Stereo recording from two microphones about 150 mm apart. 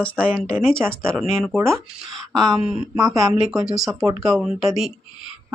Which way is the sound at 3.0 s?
20° right (ahead or behind).